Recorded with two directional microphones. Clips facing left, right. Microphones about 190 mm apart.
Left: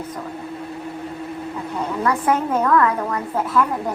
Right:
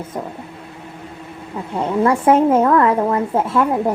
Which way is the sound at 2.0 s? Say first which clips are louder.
Right 7 dB; 25° right (ahead or behind).